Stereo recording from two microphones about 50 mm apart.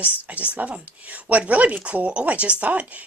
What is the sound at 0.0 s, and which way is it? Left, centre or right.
Speech, right.